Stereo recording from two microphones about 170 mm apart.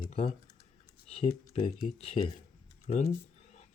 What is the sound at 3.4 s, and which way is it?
Whispering, 40° left (ahead or behind).